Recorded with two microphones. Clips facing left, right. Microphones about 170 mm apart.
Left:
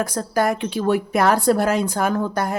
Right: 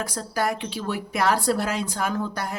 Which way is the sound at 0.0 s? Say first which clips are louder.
Left 6 dB; 50° left (ahead or behind).